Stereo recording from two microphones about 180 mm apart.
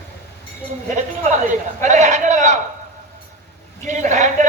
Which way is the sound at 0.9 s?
45° right (ahead or behind).